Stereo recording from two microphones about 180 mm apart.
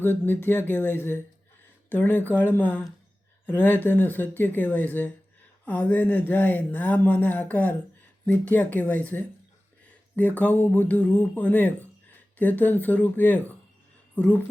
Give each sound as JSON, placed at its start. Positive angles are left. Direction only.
{"t": 0.0, "sound": "speech", "side_deg": 10}